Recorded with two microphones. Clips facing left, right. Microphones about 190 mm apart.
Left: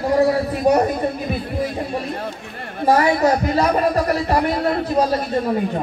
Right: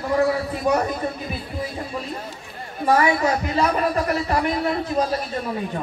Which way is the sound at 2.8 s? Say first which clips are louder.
Left 3 dB; 35° left (ahead or behind).